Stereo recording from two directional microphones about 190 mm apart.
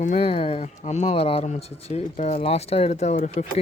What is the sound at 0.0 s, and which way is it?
Speech, 35° left (ahead or behind).